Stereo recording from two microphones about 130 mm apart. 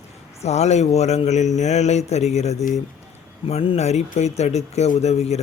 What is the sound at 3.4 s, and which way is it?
A man's voice, 45° left (ahead or behind).